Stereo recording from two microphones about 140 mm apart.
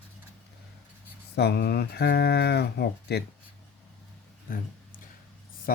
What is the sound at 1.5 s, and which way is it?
Speech, 90° left.